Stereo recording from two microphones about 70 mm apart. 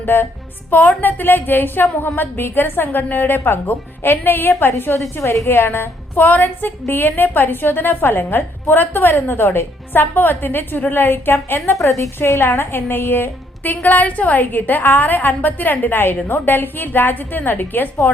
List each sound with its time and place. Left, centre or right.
0.0 s a woman's voice: left
11.8 s a woman's voice: left
12.2 s a woman's voice: left